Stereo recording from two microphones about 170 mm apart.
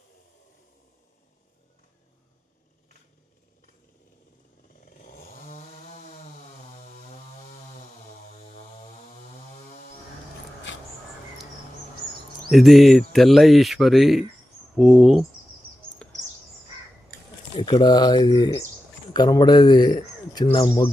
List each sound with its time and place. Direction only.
5.0 s chainsaw: 55° left (ahead or behind)
8.2 s a sound: 40° left (ahead or behind)
12.5 s speech: centre (ahead or behind)
16.0 s bird: 5° left (ahead or behind)
17.6 s speech: 25° left (ahead or behind)